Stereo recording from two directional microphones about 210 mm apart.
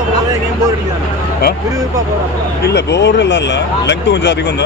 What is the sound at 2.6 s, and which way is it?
Speech, 55° left (ahead or behind).